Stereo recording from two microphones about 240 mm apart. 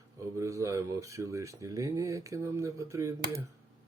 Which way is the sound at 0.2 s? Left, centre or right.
Centre.